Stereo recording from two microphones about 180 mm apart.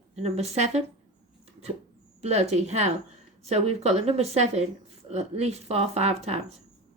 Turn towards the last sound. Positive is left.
turn(degrees=-35)  # may be behind; listen again after turning